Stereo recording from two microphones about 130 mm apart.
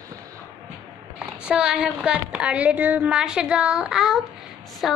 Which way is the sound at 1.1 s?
5° right (ahead or behind).